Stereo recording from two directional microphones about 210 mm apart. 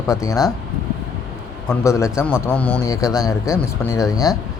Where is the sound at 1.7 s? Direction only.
15° left (ahead or behind).